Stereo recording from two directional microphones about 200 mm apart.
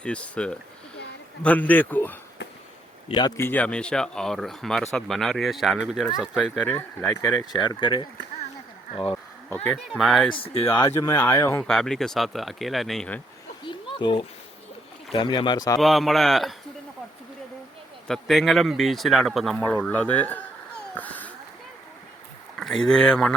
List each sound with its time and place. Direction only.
0.0 s speech: 5° left (ahead or behind)
3.1 s speech: 20° left (ahead or behind); by 6.7 s centre (ahead or behind)
7.7 s speech: 25° left (ahead or behind)
9.6 s speech: centre (ahead or behind)
10.3 s speech: 30° left (ahead or behind)
10.8 s speech: 15° left (ahead or behind)
11.6 s speech: centre (ahead or behind)
13.7 s a sound: 25° left (ahead or behind)
15.1 s speech: 25° left (ahead or behind)
15.8 s speech: centre (ahead or behind)
18.1 s speech: centre (ahead or behind)
20.9 s a sound: 10° left (ahead or behind)
22.5 s speech: centre (ahead or behind)